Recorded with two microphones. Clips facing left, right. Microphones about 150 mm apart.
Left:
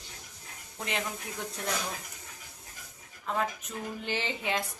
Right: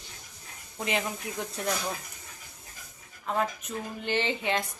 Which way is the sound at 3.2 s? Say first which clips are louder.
Right 2 dB; 5° right (ahead or behind).